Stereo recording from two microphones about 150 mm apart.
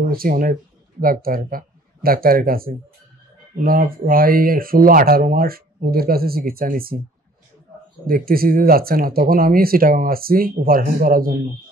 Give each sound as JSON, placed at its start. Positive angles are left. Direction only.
{"t": 0.0, "sound": "speech", "side_deg": -75}
{"t": 8.1, "sound": "speech", "side_deg": -75}